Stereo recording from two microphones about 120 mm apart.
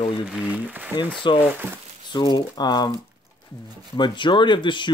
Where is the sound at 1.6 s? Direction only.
15° right (ahead or behind).